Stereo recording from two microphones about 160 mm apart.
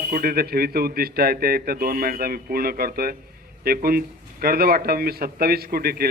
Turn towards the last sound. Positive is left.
turn(degrees=-70)  # may be behind; listen again after turning